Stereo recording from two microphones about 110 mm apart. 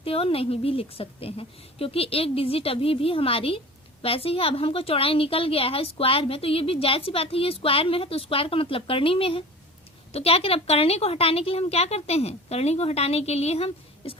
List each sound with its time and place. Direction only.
0.0 s a woman's voice: 60° left (ahead or behind)